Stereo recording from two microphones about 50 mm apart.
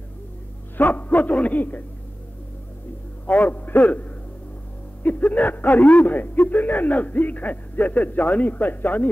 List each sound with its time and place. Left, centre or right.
0.7 s a man's voice: left
3.3 s a man's voice: left